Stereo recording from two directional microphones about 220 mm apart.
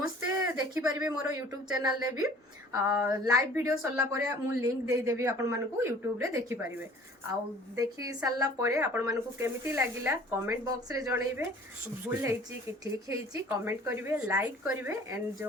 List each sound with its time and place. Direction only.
0.0 s a sound: 15° right (ahead or behind)
1.2 s speech: 15° right (ahead or behind)
7.8 s speech: 15° right (ahead or behind)